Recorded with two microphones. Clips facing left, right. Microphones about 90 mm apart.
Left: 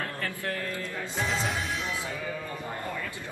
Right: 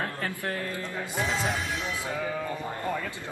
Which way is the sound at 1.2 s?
Centre (ahead or behind).